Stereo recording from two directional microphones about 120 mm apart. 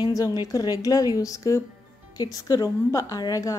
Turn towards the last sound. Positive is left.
turn(degrees=30)  # may be behind; listen again after turning